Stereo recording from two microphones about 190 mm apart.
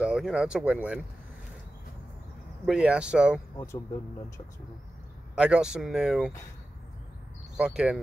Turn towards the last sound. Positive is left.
turn(degrees=-5)  # may be behind; listen again after turning